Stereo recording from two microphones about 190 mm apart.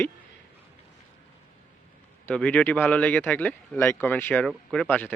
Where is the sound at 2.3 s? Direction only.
5° left (ahead or behind).